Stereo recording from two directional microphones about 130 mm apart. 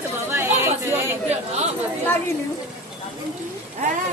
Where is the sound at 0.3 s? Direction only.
20° right (ahead or behind).